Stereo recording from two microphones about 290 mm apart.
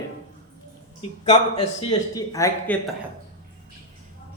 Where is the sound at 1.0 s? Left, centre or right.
Left.